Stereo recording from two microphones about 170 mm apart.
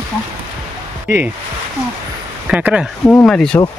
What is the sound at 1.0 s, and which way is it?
Speech, 10° right (ahead or behind).